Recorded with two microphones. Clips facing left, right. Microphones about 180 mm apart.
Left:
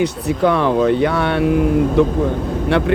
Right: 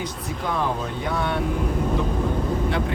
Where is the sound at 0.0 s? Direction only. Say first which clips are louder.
Left 13 dB; 70° left (ahead or behind).